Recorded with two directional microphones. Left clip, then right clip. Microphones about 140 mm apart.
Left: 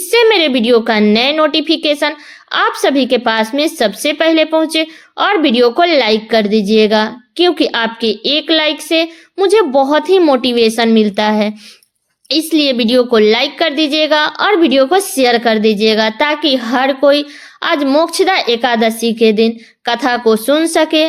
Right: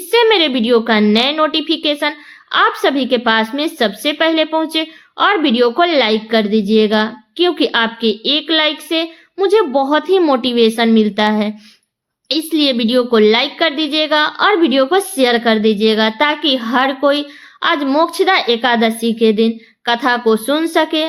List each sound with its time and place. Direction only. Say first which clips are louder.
0.1 s a woman's voice: left 2 dB; 40° left (ahead or behind)